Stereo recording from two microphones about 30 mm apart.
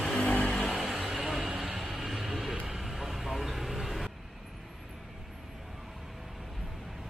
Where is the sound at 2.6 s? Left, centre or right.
Centre.